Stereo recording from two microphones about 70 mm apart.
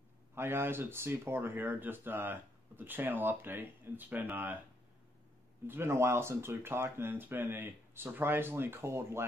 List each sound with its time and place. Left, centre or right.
0.3 s speech: right
5.7 s speech: right